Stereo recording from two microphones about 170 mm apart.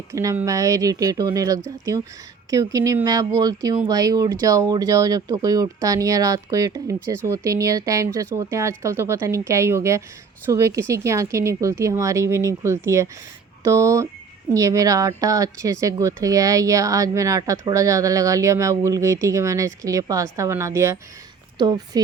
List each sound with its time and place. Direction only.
0.1 s speech: 20° right (ahead or behind)